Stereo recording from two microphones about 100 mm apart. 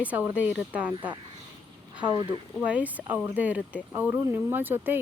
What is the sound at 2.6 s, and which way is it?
A woman's voice, 15° right (ahead or behind).